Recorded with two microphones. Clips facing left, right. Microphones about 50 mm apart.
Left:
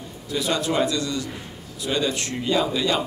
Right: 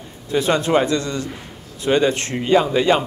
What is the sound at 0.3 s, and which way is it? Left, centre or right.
Speech, right.